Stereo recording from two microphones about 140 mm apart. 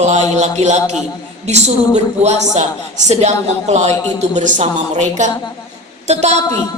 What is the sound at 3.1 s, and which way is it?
A man's voice, 55° right (ahead or behind).